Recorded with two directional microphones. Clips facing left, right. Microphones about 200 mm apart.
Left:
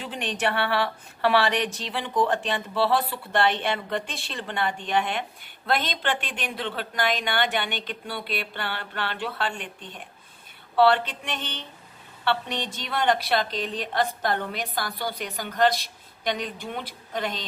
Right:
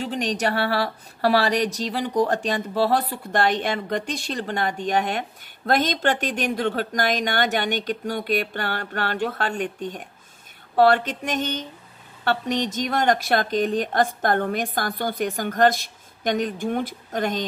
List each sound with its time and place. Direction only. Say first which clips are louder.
0.0 s a woman's voice: right 4 dB; 40° right (ahead or behind)